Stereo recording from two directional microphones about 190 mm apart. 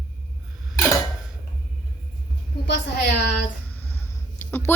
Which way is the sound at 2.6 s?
60° left (ahead or behind).